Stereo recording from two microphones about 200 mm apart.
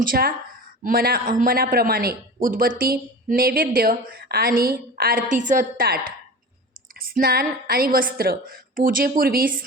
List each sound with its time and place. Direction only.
0.0 s a man's voice: 45° right (ahead or behind)